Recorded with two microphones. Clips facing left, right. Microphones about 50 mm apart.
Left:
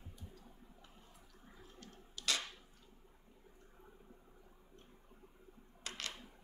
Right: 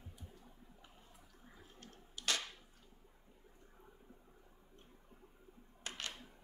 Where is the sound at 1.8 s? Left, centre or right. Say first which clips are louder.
Even; right.